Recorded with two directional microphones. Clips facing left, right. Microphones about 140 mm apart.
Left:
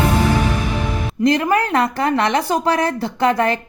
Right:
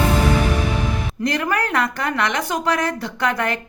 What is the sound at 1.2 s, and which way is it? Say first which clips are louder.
A woman's voice: left 6 dB; 25° left (ahead or behind).